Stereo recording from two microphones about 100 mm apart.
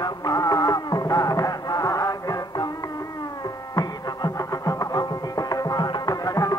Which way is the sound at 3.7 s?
40° left (ahead or behind).